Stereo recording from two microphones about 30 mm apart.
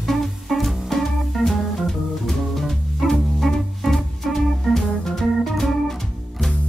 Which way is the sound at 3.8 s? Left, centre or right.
Centre.